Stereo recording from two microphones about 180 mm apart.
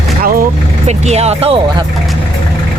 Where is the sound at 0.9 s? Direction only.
40° right (ahead or behind).